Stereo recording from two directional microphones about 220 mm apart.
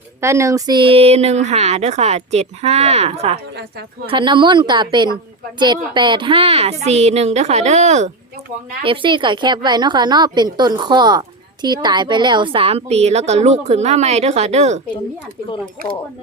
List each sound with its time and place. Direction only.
0.2 s a woman's voice: 15° right (ahead or behind); by 14.8 s 30° right (ahead or behind)